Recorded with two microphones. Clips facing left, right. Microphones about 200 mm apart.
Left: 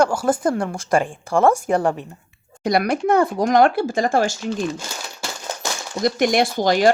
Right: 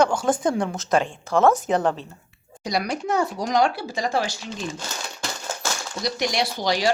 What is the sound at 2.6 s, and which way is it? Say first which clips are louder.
Speech: left 7 dB; 55° left (ahead or behind).